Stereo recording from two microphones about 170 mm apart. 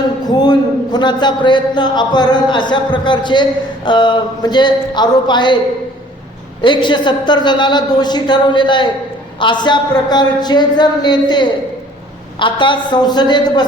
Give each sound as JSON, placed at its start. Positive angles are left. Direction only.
{"t": 0.3, "sound": "a man's voice", "side_deg": 25}
{"t": 6.6, "sound": "a man's voice", "side_deg": 25}